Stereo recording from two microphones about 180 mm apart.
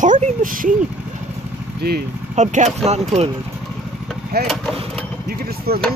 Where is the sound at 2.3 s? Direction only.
40° right (ahead or behind).